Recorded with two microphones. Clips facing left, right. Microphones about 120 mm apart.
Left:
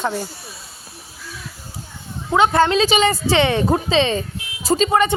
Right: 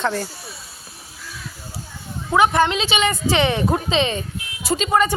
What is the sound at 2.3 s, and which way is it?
A woman's voice, 30° left (ahead or behind).